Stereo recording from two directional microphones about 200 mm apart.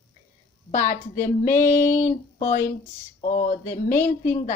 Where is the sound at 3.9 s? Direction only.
10° left (ahead or behind).